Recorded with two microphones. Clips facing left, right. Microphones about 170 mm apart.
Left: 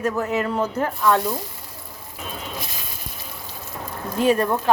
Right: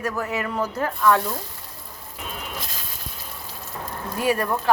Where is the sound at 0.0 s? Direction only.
20° left (ahead or behind).